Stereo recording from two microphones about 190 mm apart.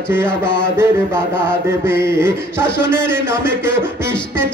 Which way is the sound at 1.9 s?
15° right (ahead or behind).